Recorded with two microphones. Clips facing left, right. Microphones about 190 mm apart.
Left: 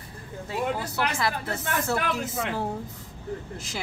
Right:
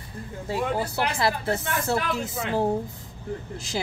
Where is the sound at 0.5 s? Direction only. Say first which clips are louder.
Right 2 dB; 30° right (ahead or behind).